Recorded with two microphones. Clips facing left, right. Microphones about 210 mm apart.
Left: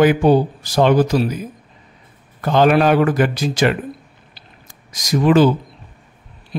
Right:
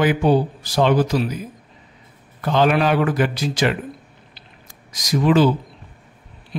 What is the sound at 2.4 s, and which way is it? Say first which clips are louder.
Speech: left 4 dB; 45° left (ahead or behind).